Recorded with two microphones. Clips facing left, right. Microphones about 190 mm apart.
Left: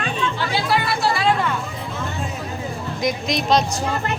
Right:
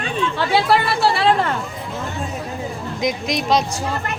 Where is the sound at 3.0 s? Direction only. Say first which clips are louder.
Right 1 dB; 15° right (ahead or behind).